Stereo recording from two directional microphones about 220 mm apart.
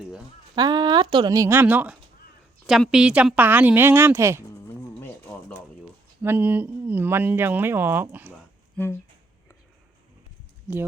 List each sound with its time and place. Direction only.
0.5 s a woman's voice: 20° right (ahead or behind)
4.8 s a sound: 10° left (ahead or behind)
6.2 s a woman's voice: 10° right (ahead or behind)
8.7 s speech: 10° left (ahead or behind)